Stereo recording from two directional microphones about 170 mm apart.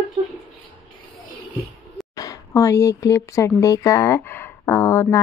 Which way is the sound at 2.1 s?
20° left (ahead or behind).